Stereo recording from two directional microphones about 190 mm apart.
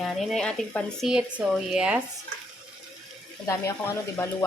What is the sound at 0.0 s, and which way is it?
Speech, centre (ahead or behind).